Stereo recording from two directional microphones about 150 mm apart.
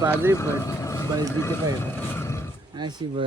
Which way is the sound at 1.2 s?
15° left (ahead or behind).